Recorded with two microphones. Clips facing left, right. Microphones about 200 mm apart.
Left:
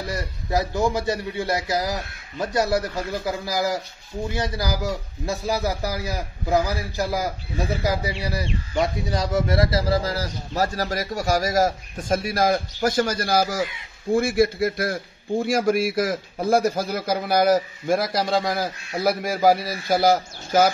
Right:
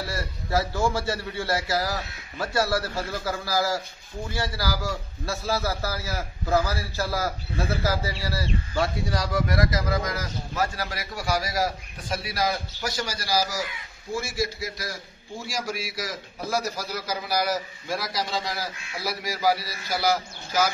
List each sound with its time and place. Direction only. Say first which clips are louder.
0.0 s a man's voice: left 2 dB; 15° left (ahead or behind); by 20.7 s 55° left (ahead or behind)